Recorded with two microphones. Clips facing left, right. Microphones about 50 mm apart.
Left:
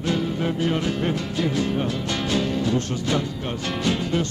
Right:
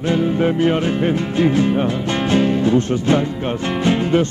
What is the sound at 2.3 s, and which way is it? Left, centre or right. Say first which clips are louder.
Speech: right 8 dB; right.